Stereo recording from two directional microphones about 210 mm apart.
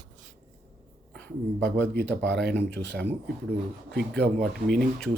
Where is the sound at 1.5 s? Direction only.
55° right (ahead or behind).